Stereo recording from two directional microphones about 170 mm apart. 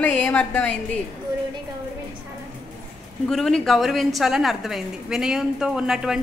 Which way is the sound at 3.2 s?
5° left (ahead or behind).